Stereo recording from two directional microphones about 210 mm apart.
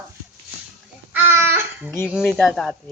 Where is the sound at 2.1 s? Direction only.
Centre (ahead or behind).